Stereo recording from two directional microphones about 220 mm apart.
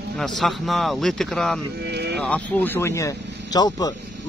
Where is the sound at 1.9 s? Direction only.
50° right (ahead or behind).